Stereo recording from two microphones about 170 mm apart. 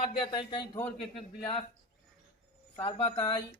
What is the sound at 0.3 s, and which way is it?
Speech, 25° left (ahead or behind).